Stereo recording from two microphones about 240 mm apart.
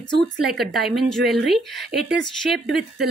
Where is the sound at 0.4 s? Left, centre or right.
Centre.